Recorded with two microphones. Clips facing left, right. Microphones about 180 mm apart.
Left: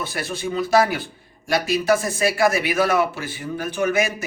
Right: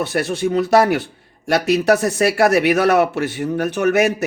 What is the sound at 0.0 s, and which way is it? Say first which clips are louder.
Speech: right 8 dB; 70° right (ahead or behind).